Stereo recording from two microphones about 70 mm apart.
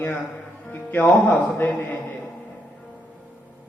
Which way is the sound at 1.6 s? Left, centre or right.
Left.